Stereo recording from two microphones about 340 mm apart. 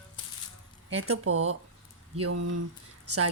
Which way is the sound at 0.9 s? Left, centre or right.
Right.